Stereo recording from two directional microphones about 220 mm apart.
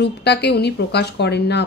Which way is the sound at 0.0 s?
50° left (ahead or behind).